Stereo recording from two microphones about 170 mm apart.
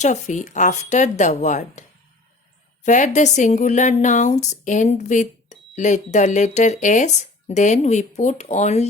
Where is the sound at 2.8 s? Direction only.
45° left (ahead or behind).